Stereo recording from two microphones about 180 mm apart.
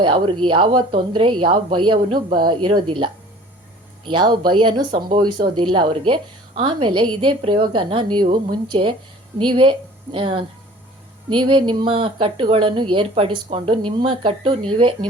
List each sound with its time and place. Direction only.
0.0 s speech: 30° right (ahead or behind)
4.0 s a woman's voice: 25° right (ahead or behind)